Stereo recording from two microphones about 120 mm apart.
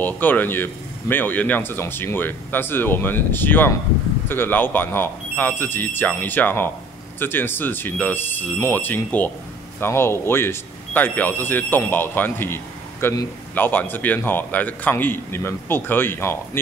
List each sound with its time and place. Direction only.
0.0 s speech: 15° left (ahead or behind)